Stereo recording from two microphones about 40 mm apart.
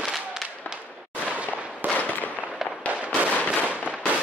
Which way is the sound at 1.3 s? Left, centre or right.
Right.